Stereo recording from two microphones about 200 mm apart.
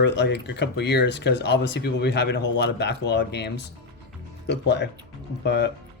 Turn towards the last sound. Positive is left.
turn(degrees=60)  # may be behind; listen again after turning